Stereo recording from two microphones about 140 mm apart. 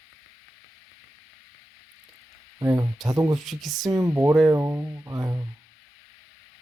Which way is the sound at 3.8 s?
25° right (ahead or behind).